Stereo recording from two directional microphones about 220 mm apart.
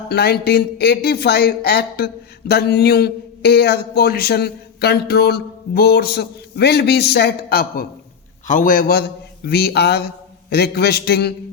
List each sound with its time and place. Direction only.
0.1 s a man's voice: 45° left (ahead or behind)